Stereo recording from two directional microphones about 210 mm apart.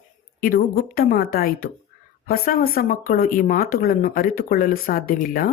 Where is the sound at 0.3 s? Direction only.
45° left (ahead or behind).